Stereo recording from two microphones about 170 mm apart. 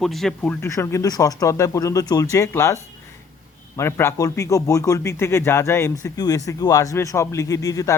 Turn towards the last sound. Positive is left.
turn(degrees=20)  # may be behind; listen again after turning